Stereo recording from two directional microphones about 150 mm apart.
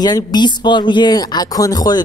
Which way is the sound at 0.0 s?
25° left (ahead or behind).